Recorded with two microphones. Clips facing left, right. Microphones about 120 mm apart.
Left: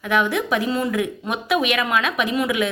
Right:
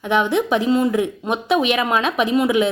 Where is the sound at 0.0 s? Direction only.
30° right (ahead or behind).